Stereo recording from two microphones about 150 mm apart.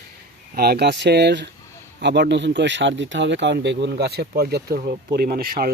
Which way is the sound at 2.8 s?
90° right.